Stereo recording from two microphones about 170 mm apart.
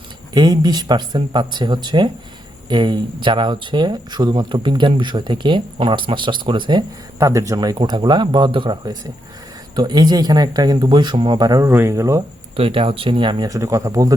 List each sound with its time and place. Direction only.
0.3 s speech: 25° right (ahead or behind)
12.5 s speech: 30° right (ahead or behind)